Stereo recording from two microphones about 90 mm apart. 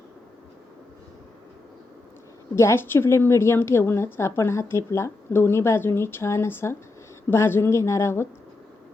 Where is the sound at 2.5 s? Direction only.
30° left (ahead or behind).